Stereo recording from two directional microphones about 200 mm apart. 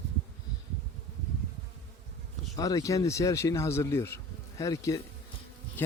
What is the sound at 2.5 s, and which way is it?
Speech, 15° left (ahead or behind).